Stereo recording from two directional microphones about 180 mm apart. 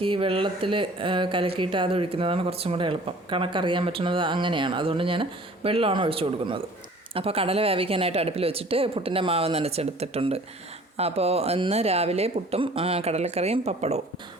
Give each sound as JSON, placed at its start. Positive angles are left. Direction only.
{"t": 0.0, "sound": "speech", "side_deg": -30}